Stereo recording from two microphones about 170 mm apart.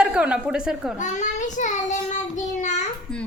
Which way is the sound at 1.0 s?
45° left (ahead or behind).